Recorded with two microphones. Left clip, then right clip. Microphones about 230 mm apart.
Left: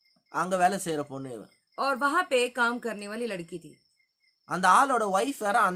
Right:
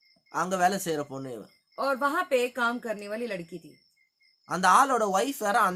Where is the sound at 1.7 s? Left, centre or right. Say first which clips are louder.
Left 1 dB; left.